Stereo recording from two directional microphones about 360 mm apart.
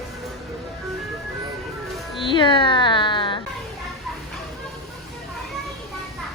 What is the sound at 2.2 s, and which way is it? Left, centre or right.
Music, centre.